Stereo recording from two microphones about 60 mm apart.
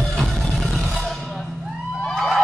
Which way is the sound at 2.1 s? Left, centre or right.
Centre.